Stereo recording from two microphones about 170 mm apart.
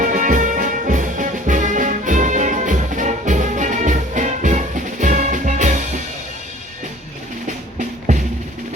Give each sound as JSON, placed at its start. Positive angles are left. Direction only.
{"t": 0.0, "sound": "music", "side_deg": -50}
{"t": 7.4, "sound": "music", "side_deg": -50}